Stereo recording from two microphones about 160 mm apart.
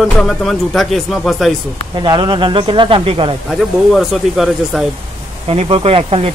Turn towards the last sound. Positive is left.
turn(degrees=-40)  # may be behind; listen again after turning